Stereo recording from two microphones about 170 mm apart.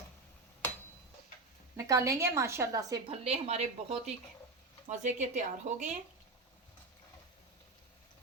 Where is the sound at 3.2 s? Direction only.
40° right (ahead or behind).